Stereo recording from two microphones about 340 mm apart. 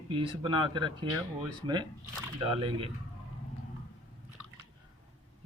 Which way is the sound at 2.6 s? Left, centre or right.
Centre.